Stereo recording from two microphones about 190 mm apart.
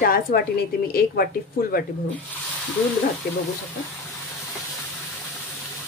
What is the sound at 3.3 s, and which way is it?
Speech, 55° left (ahead or behind).